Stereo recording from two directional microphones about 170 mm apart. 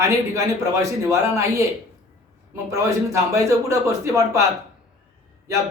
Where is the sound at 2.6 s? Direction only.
20° right (ahead or behind).